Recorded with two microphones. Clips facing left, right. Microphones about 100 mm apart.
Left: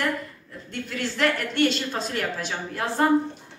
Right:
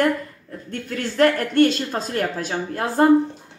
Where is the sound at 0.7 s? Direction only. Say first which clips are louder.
Right 3 dB; 50° right (ahead or behind).